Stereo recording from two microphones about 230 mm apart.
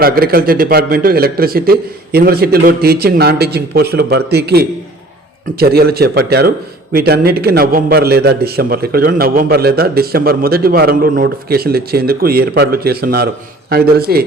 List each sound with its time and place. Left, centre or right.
0.0 s a man's voice: right